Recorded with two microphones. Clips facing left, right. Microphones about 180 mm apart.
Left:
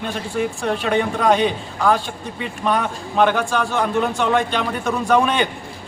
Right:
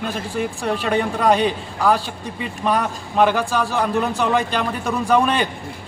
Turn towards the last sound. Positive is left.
turn(degrees=0)  # may be behind; listen again after turning